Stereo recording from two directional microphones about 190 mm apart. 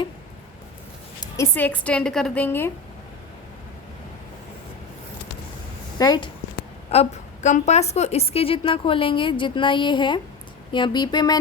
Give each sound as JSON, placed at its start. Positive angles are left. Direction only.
{"t": 1.2, "sound": "a woman's voice", "side_deg": 15}
{"t": 6.0, "sound": "a woman's voice", "side_deg": 20}
{"t": 6.9, "sound": "a woman's voice", "side_deg": 35}